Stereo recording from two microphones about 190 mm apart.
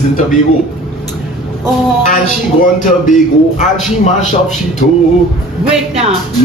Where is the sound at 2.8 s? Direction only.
40° left (ahead or behind).